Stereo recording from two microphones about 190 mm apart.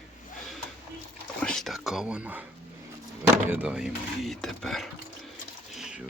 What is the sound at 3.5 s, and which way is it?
Speech, 5° right (ahead or behind).